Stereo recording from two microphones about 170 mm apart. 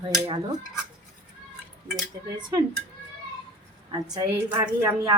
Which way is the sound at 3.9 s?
20° right (ahead or behind).